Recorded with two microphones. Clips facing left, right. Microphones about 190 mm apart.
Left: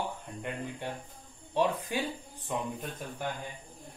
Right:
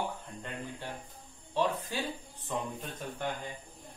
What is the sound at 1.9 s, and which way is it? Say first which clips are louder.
Speech: left 3 dB; 15° left (ahead or behind).